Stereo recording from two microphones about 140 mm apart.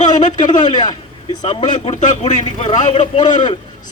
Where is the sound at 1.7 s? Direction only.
60° left (ahead or behind).